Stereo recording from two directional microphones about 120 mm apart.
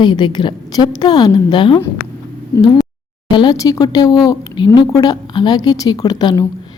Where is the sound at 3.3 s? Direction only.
40° left (ahead or behind).